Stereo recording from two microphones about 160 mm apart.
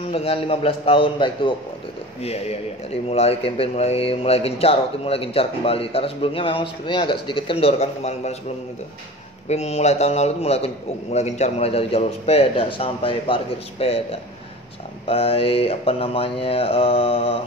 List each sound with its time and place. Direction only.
0.1 s speech: 35° left (ahead or behind)
9.5 s speech: 40° left (ahead or behind)